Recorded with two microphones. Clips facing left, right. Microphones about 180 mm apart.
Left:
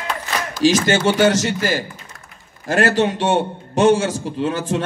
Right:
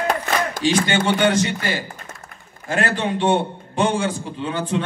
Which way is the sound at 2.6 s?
50° right (ahead or behind).